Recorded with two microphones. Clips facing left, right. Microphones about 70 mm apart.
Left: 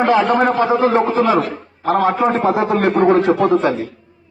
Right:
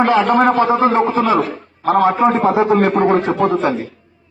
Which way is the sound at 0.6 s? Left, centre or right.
Right.